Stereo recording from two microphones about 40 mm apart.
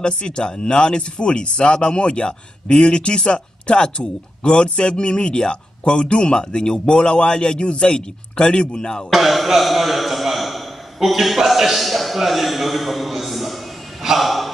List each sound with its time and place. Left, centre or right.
0.0 s speech: left
9.1 s a man's voice: centre
14.0 s a sound: centre